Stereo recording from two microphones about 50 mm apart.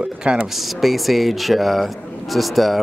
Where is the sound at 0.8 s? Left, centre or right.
Centre.